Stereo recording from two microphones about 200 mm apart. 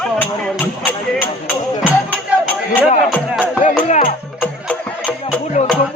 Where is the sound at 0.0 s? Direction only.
5° left (ahead or behind).